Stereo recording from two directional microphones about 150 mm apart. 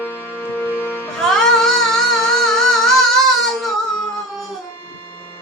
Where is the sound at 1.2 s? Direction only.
5° left (ahead or behind).